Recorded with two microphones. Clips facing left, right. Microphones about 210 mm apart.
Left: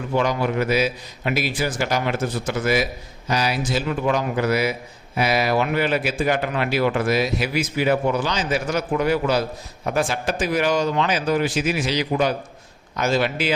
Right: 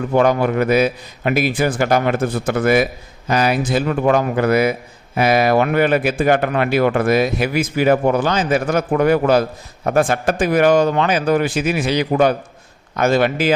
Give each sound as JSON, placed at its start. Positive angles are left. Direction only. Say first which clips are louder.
{"t": 0.1, "sound": "a man's voice", "louder": "right 6 dB", "side_deg": -55}